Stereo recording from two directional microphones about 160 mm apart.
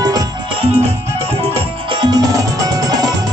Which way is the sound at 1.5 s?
30° right (ahead or behind).